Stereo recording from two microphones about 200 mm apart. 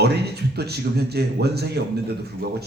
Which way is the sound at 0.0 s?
55° right (ahead or behind).